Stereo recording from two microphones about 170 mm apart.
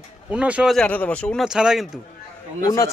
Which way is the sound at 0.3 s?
5° right (ahead or behind).